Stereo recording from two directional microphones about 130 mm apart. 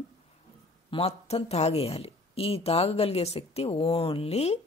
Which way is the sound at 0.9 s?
50° left (ahead or behind).